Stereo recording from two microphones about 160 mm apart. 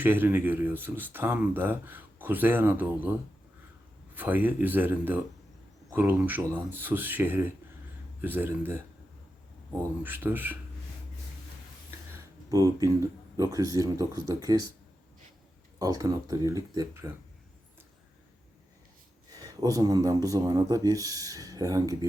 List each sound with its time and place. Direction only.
0.0 s speech: 10° right (ahead or behind)
12.1 s speech: 20° right (ahead or behind)
15.8 s speech: 25° right (ahead or behind)
19.3 s speech: 25° right (ahead or behind)